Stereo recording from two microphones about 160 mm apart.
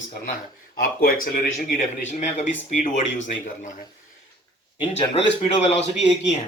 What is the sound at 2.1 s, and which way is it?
Speech, 50° left (ahead or behind).